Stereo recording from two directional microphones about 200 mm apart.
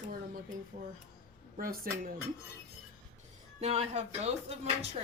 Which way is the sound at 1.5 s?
45° right (ahead or behind).